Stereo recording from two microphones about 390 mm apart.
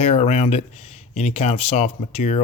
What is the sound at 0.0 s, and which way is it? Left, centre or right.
Speech, centre.